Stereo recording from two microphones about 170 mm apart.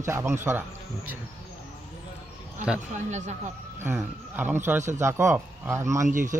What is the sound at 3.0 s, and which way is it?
Speech, 45° right (ahead or behind).